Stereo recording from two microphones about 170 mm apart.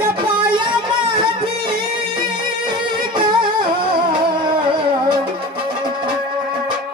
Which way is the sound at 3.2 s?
30° right (ahead or behind).